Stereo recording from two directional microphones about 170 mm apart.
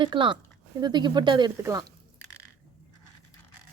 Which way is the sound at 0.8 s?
25° right (ahead or behind).